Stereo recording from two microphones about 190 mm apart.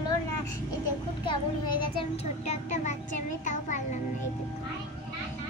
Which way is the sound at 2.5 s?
40° left (ahead or behind).